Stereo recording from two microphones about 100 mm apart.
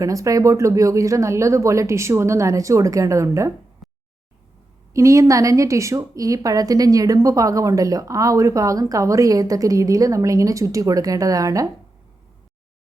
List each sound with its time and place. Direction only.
0.0 s a woman's voice: 35° right (ahead or behind)
3.8 s a sound: centre (ahead or behind)
4.9 s a woman's voice: 30° right (ahead or behind)